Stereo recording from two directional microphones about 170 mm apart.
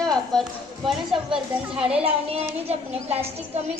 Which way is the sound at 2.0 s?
35° right (ahead or behind).